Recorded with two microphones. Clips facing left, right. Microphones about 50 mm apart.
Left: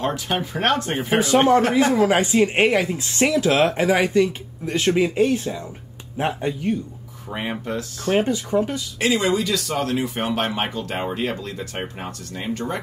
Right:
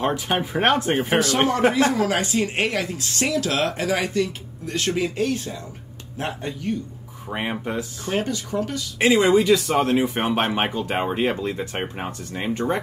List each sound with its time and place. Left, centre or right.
0.0 s speech: centre
1.8 s speech: left
7.2 s speech: centre
8.1 s speech: left
9.0 s speech: right